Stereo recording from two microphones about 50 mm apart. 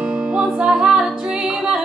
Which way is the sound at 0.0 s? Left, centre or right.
Right.